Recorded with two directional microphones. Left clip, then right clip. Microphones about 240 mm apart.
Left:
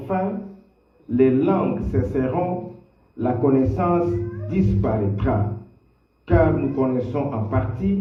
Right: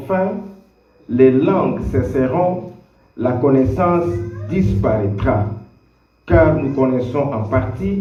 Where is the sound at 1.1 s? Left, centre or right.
Right.